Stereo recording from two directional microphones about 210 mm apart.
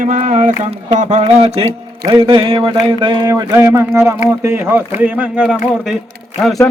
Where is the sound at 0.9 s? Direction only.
30° right (ahead or behind); by 3.8 s 15° right (ahead or behind).